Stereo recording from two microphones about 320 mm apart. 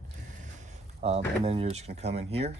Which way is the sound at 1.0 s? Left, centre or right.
Centre.